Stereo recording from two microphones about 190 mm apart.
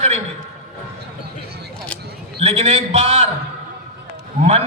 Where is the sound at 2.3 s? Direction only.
35° right (ahead or behind).